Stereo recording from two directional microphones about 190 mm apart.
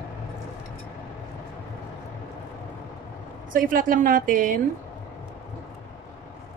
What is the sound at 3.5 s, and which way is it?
A woman's voice, 45° right (ahead or behind).